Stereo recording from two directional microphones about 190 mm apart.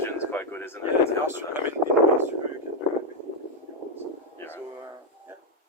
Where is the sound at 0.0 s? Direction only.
10° left (ahead or behind).